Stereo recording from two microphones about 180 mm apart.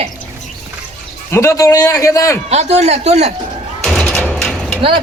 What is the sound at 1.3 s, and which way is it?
Speech, 15° left (ahead or behind).